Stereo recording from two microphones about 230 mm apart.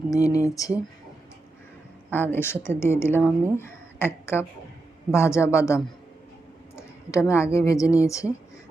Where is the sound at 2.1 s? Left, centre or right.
Centre.